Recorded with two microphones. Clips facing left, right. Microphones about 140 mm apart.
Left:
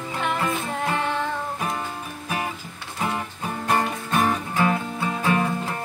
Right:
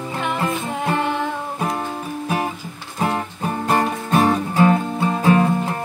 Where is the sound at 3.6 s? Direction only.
25° right (ahead or behind).